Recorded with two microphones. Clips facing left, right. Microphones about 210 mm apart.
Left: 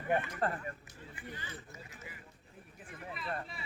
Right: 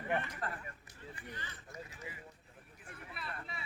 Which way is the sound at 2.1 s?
25° right (ahead or behind).